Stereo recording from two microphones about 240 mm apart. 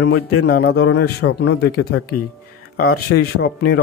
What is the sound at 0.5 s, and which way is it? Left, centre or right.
Speech, left.